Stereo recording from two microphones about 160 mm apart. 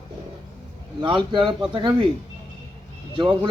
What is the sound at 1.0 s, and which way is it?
Speech, 30° right (ahead or behind).